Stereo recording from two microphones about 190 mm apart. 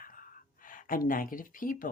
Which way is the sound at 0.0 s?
45° left (ahead or behind).